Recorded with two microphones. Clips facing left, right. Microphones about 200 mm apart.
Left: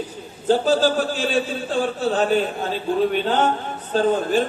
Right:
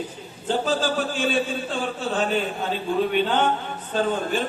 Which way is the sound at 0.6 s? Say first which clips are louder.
Left 5 dB; 40° left (ahead or behind).